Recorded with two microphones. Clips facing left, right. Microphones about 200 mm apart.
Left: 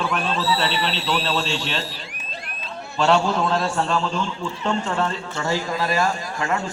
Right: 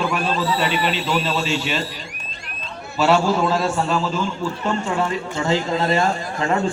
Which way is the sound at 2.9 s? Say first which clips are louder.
Right 2 dB; 5° right (ahead or behind).